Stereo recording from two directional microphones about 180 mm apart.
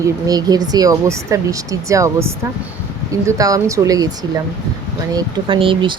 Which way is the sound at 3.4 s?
20° right (ahead or behind).